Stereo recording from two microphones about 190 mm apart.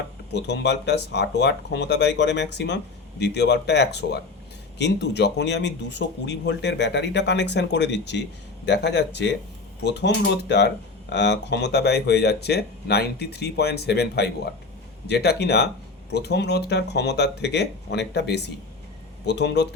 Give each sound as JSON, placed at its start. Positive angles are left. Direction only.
{"t": 0.3, "sound": "speech", "side_deg": 65}